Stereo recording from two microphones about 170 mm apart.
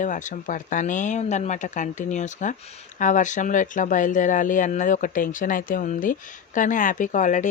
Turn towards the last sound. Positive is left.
turn(degrees=50)  # may be behind; listen again after turning